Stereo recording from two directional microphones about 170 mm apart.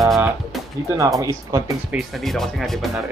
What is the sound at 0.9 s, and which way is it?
Speech, 20° right (ahead or behind).